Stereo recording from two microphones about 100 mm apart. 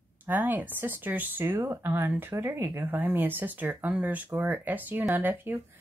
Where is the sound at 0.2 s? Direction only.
20° right (ahead or behind).